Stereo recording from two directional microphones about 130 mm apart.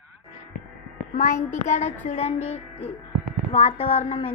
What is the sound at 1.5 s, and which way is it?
Child singing, 65° left (ahead or behind).